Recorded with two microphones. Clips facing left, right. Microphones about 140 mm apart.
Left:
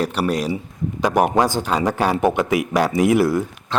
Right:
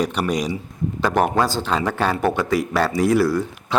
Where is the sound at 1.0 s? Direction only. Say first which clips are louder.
Left 2 dB; 15° left (ahead or behind).